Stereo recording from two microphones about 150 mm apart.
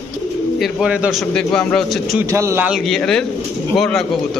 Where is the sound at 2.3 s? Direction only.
20° right (ahead or behind).